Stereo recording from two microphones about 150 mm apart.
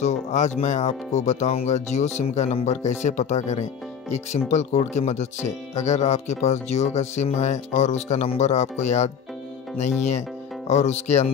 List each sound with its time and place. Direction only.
0.0 s speech: 50° left (ahead or behind)